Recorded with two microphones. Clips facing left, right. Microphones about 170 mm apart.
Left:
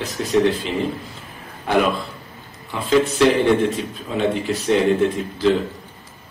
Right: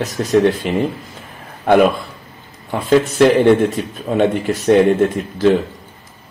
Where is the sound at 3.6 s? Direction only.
50° right (ahead or behind).